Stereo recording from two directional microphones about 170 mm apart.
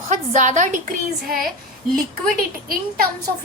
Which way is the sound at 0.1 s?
45° right (ahead or behind).